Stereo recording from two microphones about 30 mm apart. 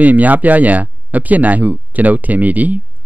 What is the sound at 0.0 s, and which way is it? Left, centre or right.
Speech, right.